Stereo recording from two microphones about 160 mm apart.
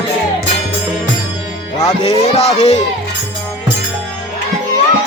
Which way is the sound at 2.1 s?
40° left (ahead or behind).